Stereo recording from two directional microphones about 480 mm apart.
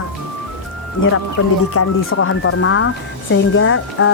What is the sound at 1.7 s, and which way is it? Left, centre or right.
Speech, left.